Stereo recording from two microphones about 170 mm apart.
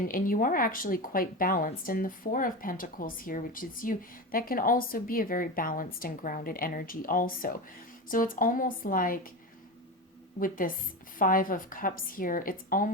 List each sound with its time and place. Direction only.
0.1 s speech: 55° left (ahead or behind)
10.4 s speech: 55° left (ahead or behind)